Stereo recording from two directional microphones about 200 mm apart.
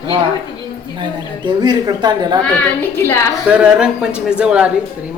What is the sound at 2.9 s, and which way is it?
Speech, 10° left (ahead or behind).